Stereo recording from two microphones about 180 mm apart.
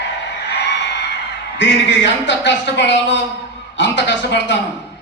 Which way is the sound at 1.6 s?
75° left (ahead or behind).